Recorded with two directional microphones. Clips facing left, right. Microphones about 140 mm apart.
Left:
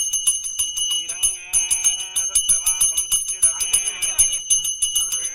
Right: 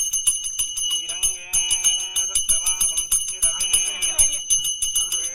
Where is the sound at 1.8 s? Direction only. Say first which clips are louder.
Right 1 dB; centre (ahead or behind).